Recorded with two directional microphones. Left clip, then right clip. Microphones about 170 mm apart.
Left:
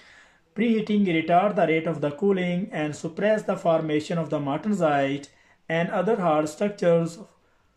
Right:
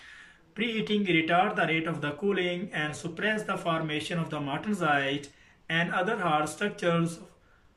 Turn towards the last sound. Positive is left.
turn(degrees=35)  # may be behind; listen again after turning